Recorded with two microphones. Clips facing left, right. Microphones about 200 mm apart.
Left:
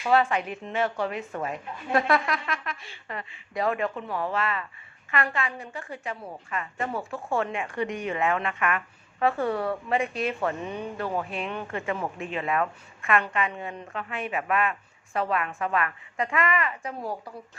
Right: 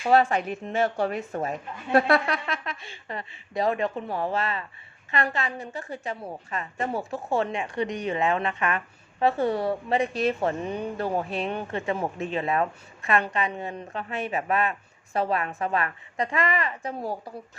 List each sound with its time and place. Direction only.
0.0 s a woman's voice: 40° right (ahead or behind)
5.1 s a woman's voice: 25° right (ahead or behind)
5.4 s a woman's voice: 40° right (ahead or behind)
7.3 s a woman's voice: 20° right (ahead or behind)
9.6 s a woman's voice: 35° right (ahead or behind)